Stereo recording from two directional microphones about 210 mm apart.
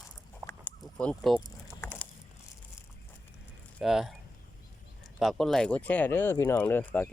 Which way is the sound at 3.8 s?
Centre (ahead or behind).